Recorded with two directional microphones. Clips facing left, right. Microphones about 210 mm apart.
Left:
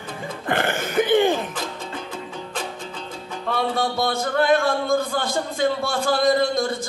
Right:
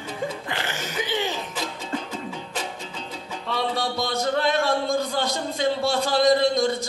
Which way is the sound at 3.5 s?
50° left (ahead or behind).